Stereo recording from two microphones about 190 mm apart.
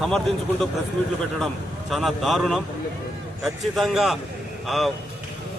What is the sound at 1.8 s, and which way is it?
A man's voice, centre (ahead or behind).